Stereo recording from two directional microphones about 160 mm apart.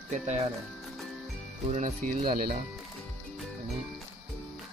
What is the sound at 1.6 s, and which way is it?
Speech, 50° right (ahead or behind).